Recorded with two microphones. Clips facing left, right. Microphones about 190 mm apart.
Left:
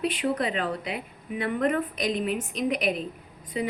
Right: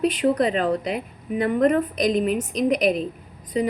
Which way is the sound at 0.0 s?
40° right (ahead or behind).